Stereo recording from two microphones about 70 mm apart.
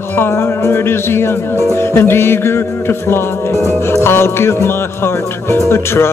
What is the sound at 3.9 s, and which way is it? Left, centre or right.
Music, left.